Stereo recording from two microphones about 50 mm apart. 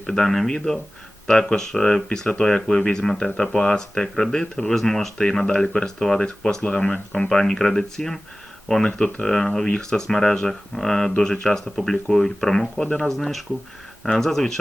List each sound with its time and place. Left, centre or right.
0.0 s speech: centre
13.1 s speech: centre